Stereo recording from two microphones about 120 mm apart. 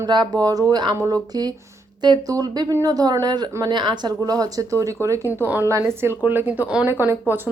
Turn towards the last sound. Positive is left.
turn(degrees=-15)  # may be behind; listen again after turning